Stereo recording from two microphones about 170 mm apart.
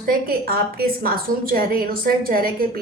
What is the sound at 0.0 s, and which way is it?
A woman's voice, 60° right (ahead or behind).